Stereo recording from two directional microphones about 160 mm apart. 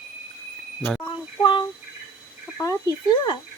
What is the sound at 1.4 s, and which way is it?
Speech, 30° left (ahead or behind).